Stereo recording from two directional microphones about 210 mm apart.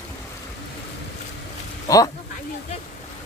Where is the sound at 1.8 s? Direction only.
15° left (ahead or behind).